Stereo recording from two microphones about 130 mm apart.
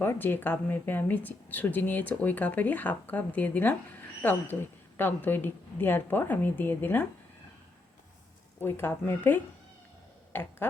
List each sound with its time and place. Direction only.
0.0 s speech: 15° left (ahead or behind)
8.6 s speech: 15° left (ahead or behind)